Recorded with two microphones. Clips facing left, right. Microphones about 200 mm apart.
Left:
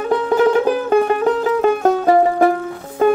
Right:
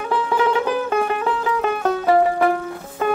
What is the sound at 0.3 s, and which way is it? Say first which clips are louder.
Music: left 6 dB; 45° left (ahead or behind).